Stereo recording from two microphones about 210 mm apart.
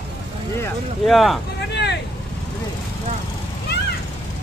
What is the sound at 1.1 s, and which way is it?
Speech, centre (ahead or behind).